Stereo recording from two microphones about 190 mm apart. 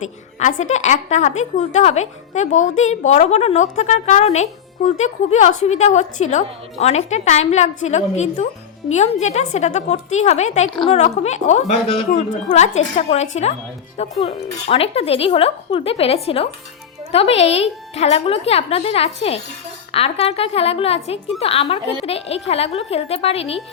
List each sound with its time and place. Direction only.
0.0 s a woman's voice: 40° left (ahead or behind)